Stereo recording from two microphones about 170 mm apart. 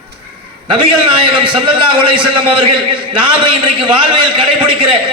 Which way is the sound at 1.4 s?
30° right (ahead or behind).